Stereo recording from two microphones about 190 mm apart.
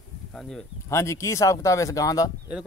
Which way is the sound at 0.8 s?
15° left (ahead or behind).